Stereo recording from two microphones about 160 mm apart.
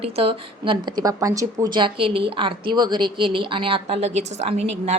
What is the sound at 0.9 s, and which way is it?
Speech, 25° right (ahead or behind).